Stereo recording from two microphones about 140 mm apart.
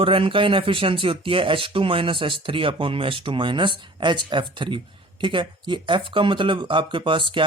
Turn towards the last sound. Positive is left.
turn(degrees=-35)  # may be behind; listen again after turning